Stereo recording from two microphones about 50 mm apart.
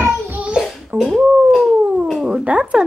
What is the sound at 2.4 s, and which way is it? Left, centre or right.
Speech, right.